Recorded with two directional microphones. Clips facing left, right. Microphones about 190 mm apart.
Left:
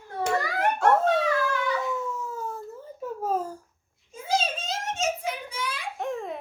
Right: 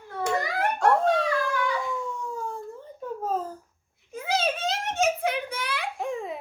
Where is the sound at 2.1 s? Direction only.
5° left (ahead or behind).